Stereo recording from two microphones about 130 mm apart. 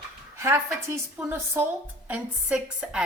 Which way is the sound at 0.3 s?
20° right (ahead or behind).